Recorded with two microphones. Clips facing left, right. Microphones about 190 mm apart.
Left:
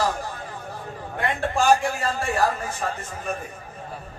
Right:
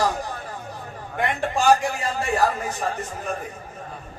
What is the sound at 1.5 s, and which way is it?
A man's voice, 20° right (ahead or behind).